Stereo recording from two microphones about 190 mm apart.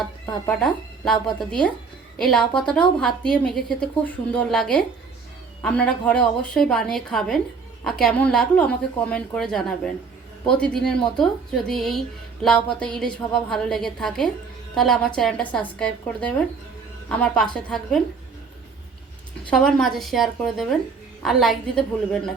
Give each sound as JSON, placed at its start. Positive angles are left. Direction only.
{"t": 0.0, "sound": "speech", "side_deg": 5}
{"t": 19.5, "sound": "speech", "side_deg": 5}